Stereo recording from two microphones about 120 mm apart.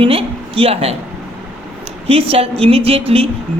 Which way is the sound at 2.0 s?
55° right (ahead or behind).